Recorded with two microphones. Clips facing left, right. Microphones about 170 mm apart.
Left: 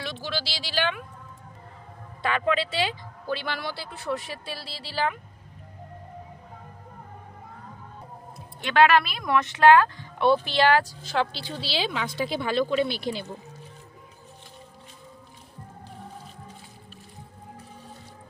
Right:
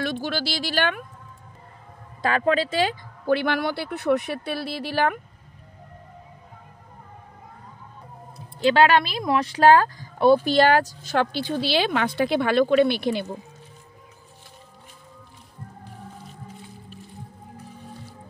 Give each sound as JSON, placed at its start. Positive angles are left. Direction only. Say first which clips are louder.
{"t": 0.0, "sound": "speech", "louder": "right 6 dB", "side_deg": -50}
{"t": 2.2, "sound": "a woman's voice", "louder": "right 4 dB", "side_deg": -40}
{"t": 8.6, "sound": "a woman's voice", "louder": "right 2 dB", "side_deg": -30}